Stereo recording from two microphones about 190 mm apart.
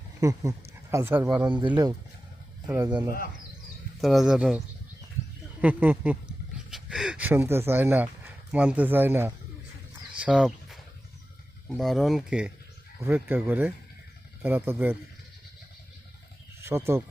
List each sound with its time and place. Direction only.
0.2 s speech: 15° right (ahead or behind)
1.5 s speech: 25° right (ahead or behind)
4.0 s speech: centre (ahead or behind)
5.6 s speech: 10° right (ahead or behind)
10.2 s dog: 5° right (ahead or behind)
11.8 s speech: centre (ahead or behind)
16.6 s speech: 15° right (ahead or behind)